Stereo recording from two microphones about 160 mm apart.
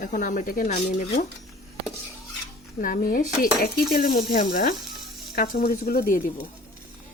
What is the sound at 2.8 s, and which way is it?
Speech, 60° left (ahead or behind).